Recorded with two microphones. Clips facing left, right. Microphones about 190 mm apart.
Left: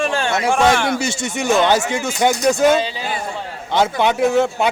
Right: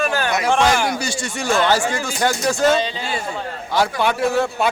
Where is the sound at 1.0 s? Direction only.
25° left (ahead or behind).